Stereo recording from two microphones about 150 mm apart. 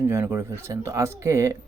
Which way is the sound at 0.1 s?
15° right (ahead or behind).